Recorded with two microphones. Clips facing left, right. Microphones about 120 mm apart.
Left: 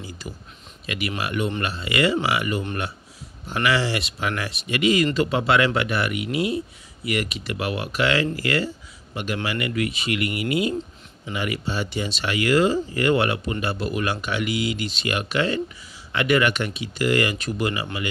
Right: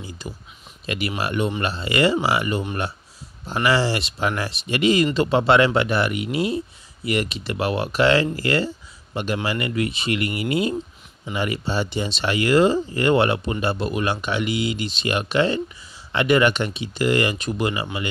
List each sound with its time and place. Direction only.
0.2 s speech: 20° right (ahead or behind)
0.8 s speech: 35° right (ahead or behind)